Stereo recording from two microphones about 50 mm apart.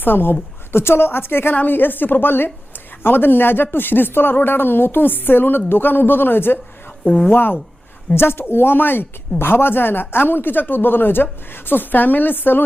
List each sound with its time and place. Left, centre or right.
0.0 s speech: left